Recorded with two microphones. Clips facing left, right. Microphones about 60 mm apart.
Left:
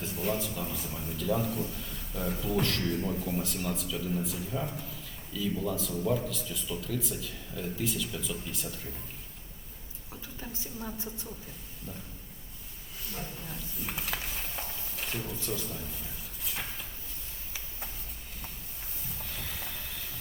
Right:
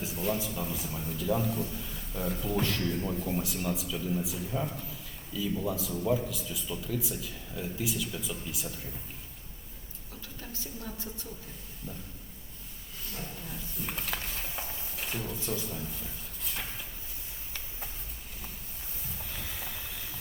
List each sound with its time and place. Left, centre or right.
0.0 s a man's voice: centre
10.5 s a woman's voice: centre
13.4 s a sound: centre
15.4 s a man's voice: centre
15.6 s a sound: centre
19.2 s train: centre